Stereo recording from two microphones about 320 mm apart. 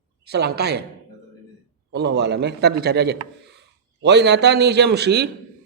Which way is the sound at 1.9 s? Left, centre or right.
Right.